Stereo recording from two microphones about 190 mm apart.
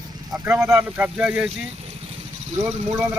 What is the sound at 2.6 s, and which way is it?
Speech, 5° right (ahead or behind).